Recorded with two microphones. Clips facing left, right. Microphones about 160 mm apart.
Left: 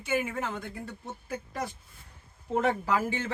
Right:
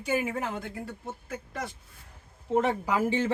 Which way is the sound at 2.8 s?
20° right (ahead or behind).